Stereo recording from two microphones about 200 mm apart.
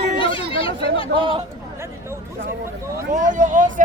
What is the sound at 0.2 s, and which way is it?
Chatter, 25° left (ahead or behind).